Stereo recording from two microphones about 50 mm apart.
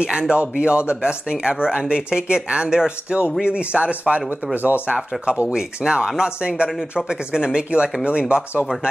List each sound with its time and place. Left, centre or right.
0.0 s speech: centre